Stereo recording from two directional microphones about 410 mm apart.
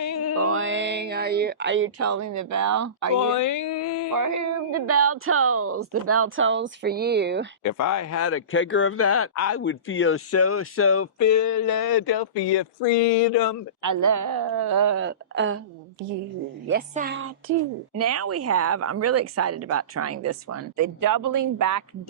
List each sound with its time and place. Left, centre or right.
0.0 s music: left
0.3 s speech: right
3.2 s a sound: left
4.1 s speech: right
7.6 s speech: left
13.8 s a woman's voice: right
14.9 s speech: right
16.6 s speech: right
17.9 s speech: right